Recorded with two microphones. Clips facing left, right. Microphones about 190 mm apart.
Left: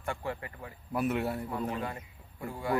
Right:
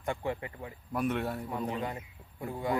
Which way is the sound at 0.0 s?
20° right (ahead or behind).